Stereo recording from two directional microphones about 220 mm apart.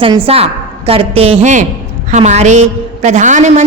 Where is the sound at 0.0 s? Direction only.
25° right (ahead or behind).